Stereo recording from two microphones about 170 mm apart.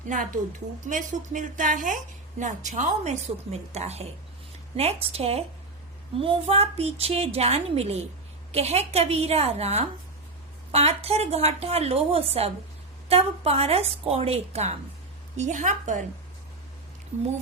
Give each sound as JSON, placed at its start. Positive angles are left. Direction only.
{"t": 0.8, "sound": "a woman's voice", "side_deg": -50}